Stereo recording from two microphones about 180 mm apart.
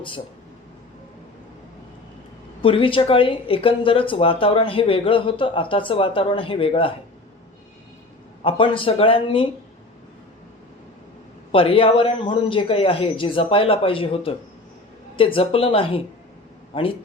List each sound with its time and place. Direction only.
2.6 s speech: 30° left (ahead or behind)
8.4 s speech: 30° left (ahead or behind)
11.5 s speech: 30° left (ahead or behind)